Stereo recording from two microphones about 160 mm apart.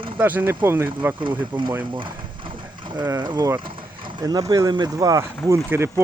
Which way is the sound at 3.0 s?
25° right (ahead or behind).